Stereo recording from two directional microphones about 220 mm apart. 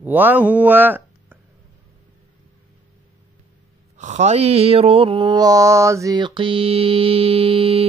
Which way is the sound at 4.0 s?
30° right (ahead or behind).